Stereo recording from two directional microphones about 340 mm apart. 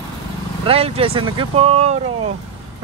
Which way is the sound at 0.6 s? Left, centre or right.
Centre.